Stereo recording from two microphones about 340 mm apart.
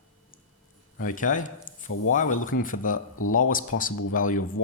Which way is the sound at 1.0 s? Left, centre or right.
Left.